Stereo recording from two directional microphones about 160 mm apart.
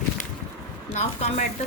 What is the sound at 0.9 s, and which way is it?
Speech, 45° left (ahead or behind).